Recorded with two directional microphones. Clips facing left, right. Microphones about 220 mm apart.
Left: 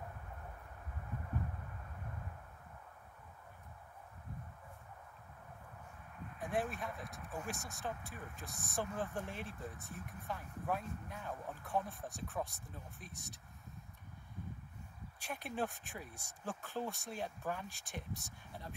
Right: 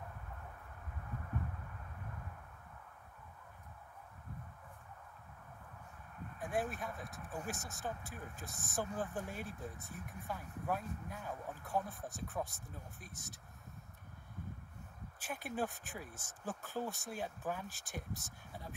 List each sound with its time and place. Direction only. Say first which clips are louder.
6.4 s speech: even; centre (ahead or behind)
15.1 s speech: right 1 dB; centre (ahead or behind)